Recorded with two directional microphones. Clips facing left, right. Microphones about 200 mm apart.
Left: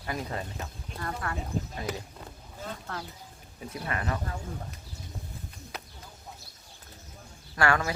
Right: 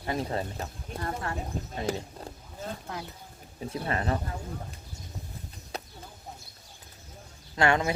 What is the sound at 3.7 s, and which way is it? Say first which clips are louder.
Speech: right 3 dB; 30° right (ahead or behind).